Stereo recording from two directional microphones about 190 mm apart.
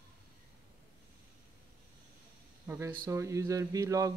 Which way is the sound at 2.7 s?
10° right (ahead or behind).